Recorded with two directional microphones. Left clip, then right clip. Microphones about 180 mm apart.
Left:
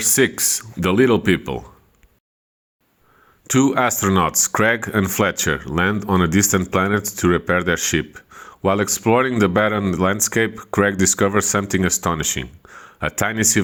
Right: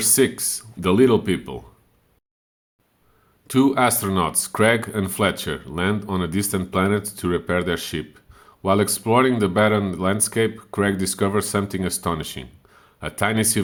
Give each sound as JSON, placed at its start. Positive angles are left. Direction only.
{"t": 0.0, "sound": "speech", "side_deg": 25}
{"t": 3.4, "sound": "speech", "side_deg": 25}